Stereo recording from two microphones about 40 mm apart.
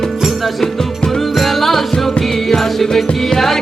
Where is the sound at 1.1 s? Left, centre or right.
Centre.